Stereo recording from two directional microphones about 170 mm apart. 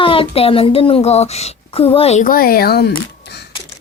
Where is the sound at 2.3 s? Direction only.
60° left (ahead or behind).